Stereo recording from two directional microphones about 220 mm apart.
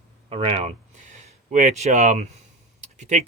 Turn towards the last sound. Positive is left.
turn(degrees=-30)  # may be behind; listen again after turning